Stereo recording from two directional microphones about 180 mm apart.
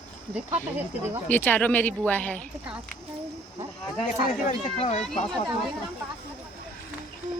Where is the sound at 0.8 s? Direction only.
10° right (ahead or behind).